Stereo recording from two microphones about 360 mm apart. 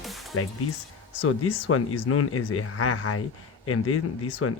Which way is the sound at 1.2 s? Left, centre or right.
Left.